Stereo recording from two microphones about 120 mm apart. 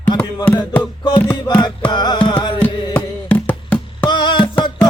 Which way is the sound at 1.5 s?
35° left (ahead or behind).